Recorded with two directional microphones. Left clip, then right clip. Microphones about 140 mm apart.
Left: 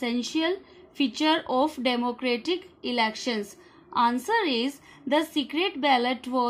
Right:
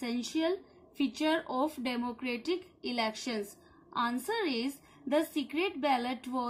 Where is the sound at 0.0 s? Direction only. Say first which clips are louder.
Left 6 dB; 45° left (ahead or behind).